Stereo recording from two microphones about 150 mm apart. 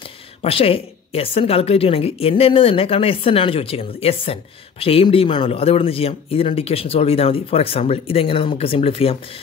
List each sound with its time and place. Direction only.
0.4 s a woman's voice: 40° left (ahead or behind)